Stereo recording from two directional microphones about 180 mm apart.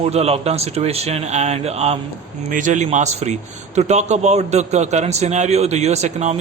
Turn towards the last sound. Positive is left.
turn(degrees=-40)  # may be behind; listen again after turning